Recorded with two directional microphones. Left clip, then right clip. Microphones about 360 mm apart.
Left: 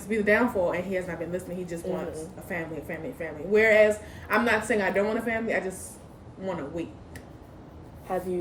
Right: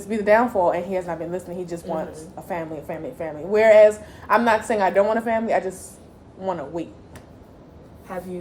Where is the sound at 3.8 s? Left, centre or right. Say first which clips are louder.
Right 8 dB; centre.